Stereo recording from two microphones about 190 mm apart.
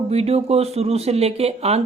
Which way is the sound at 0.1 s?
35° right (ahead or behind).